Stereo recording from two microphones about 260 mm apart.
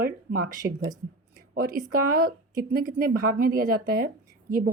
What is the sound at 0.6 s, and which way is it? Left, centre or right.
A woman's voice, right.